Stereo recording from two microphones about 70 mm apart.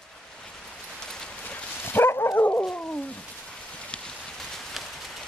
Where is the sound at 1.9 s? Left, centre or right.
Left.